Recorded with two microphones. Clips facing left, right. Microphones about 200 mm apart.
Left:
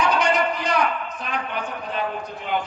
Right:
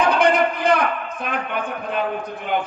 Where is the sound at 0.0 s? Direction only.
55° right (ahead or behind).